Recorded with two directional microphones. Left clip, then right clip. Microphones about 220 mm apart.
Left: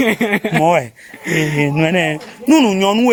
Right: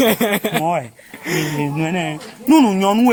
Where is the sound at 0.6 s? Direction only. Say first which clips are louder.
Left 6 dB; 45° left (ahead or behind).